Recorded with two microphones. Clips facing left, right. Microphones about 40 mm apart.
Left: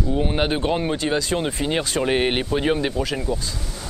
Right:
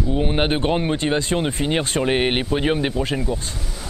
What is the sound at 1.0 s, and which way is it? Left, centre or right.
Speech, right.